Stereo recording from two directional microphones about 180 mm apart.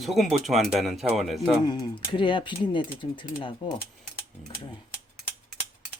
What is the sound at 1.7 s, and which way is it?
Speech, 25° left (ahead or behind).